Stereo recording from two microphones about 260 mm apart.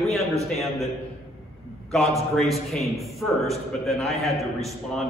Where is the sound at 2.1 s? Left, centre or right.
Centre.